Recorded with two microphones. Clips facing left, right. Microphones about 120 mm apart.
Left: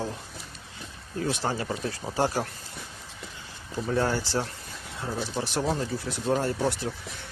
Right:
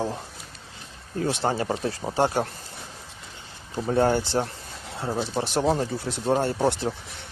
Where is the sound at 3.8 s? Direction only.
30° right (ahead or behind).